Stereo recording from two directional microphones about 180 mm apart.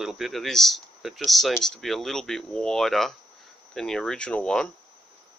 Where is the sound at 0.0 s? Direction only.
Centre (ahead or behind).